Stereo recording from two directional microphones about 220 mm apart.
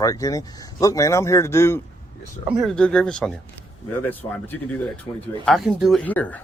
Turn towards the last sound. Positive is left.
turn(degrees=5)  # may be behind; listen again after turning